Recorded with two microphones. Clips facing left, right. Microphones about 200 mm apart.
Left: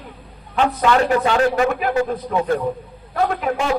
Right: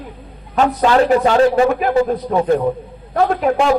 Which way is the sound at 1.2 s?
30° right (ahead or behind).